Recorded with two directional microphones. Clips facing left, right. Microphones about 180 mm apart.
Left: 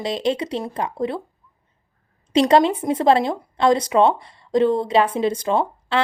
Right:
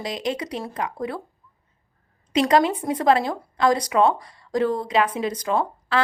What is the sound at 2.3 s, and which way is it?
A woman's voice, 30° left (ahead or behind).